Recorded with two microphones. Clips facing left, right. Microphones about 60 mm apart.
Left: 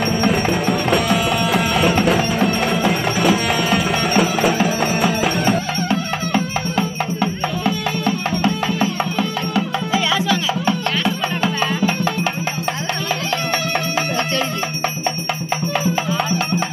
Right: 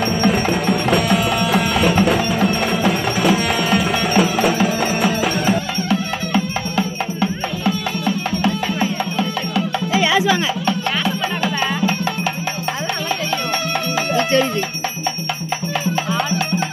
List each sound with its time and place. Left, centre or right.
0.0 s music: centre
9.9 s music: centre